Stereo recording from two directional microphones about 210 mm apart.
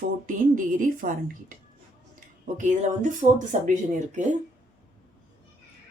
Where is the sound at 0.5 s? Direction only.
40° right (ahead or behind).